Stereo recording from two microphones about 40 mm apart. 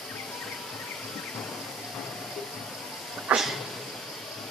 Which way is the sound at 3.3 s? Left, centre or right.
Right.